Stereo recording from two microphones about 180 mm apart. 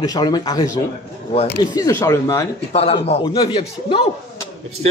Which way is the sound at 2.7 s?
35° left (ahead or behind).